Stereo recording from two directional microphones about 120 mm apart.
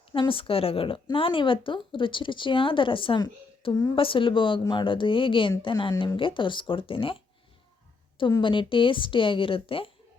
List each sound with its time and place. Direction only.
0.1 s speech: 45° left (ahead or behind)
8.3 s speech: 45° left (ahead or behind)